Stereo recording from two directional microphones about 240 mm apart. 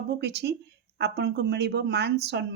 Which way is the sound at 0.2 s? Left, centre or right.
Right.